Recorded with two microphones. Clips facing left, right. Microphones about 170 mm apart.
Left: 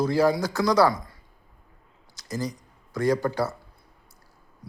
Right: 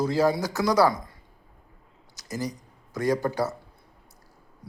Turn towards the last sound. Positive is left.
turn(degrees=-15)  # may be behind; listen again after turning